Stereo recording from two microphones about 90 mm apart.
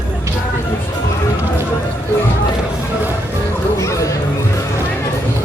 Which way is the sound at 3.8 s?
35° left (ahead or behind).